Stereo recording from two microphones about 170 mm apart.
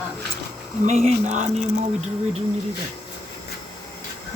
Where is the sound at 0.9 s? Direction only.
40° right (ahead or behind).